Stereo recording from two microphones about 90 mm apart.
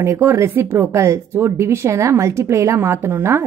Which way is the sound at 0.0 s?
30° right (ahead or behind).